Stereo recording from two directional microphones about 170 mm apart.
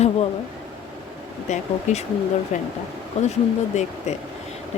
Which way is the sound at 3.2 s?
40° left (ahead or behind).